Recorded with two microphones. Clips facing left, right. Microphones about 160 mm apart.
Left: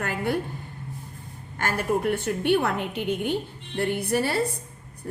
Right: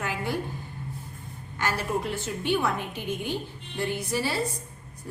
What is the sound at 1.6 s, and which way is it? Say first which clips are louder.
A woman's voice: left 3 dB; 50° left (ahead or behind).